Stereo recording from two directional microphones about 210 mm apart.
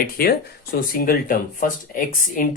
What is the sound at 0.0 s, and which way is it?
Speech, 45° left (ahead or behind).